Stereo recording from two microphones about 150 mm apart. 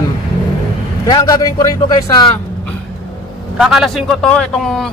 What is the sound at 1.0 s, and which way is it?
A man's voice, 25° left (ahead or behind).